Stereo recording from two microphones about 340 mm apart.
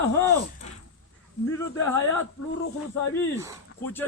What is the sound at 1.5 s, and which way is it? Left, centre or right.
Speech, centre.